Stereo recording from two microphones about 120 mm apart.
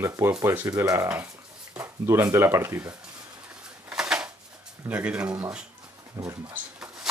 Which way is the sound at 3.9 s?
5° right (ahead or behind).